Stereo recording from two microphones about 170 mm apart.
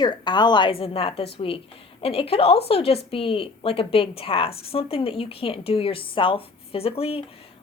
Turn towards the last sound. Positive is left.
turn(degrees=35)  # may be behind; listen again after turning